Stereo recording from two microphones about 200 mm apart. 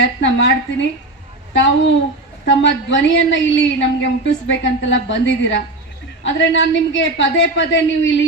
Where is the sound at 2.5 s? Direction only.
65° left (ahead or behind).